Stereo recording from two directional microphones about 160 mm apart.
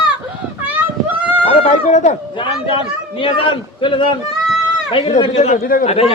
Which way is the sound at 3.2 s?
35° left (ahead or behind).